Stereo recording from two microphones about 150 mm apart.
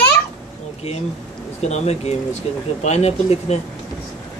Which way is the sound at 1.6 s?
45° left (ahead or behind).